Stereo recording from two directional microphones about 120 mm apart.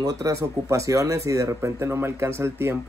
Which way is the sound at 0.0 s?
30° right (ahead or behind).